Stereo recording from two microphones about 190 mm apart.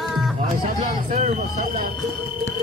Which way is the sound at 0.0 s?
Centre (ahead or behind).